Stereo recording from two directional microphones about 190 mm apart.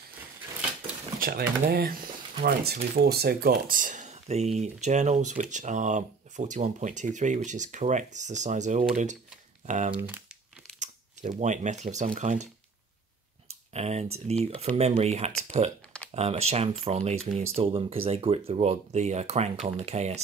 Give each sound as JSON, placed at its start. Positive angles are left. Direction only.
{"t": 1.2, "sound": "speech", "side_deg": -55}
{"t": 9.9, "sound": "speech", "side_deg": -10}
{"t": 10.8, "sound": "speech", "side_deg": -40}
{"t": 13.7, "sound": "speech", "side_deg": -35}